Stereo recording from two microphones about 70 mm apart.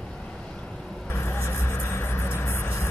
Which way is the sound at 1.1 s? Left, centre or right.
Left.